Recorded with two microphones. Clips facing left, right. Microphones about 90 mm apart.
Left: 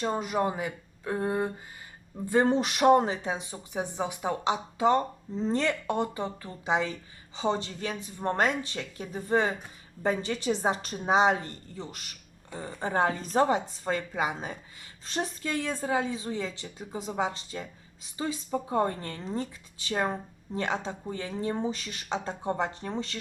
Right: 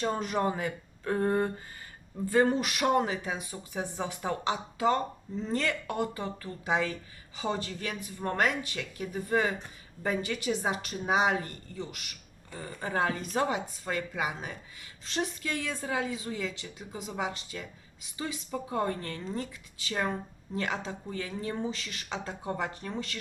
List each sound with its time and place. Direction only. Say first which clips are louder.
0.0 s speech: left 1 dB; 5° left (ahead or behind)
2.3 s a woman's voice: left 1 dB; 25° left (ahead or behind)
12.5 s a woman's voice: left 3 dB; 20° left (ahead or behind)